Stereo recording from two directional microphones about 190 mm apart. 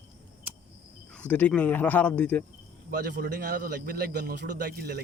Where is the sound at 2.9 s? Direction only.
55° right (ahead or behind).